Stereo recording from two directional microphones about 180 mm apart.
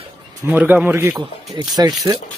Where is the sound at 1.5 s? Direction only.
25° right (ahead or behind).